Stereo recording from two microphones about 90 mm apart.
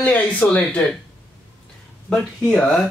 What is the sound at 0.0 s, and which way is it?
Speech, 15° left (ahead or behind).